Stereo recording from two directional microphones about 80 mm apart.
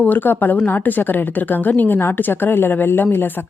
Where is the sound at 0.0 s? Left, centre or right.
Left.